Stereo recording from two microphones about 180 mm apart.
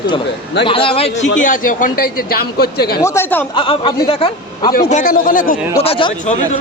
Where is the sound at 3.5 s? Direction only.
30° left (ahead or behind).